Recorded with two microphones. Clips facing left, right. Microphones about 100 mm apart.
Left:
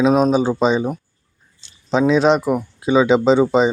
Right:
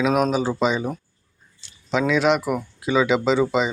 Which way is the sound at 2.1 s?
25° left (ahead or behind).